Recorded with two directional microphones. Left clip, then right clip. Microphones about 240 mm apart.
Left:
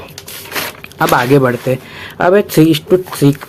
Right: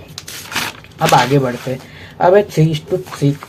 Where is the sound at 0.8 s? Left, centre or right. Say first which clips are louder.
Left 1 dB; left.